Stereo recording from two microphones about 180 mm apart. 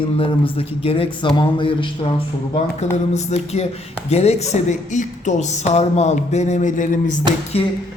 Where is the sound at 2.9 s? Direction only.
40° left (ahead or behind).